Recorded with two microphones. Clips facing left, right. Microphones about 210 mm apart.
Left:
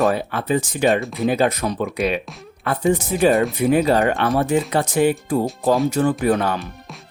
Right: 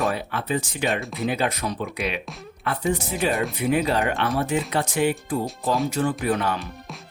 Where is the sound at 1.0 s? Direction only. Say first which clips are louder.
Left 5 dB; centre (ahead or behind).